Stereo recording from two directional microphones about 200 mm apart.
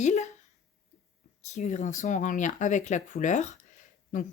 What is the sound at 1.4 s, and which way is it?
Speech, 35° left (ahead or behind).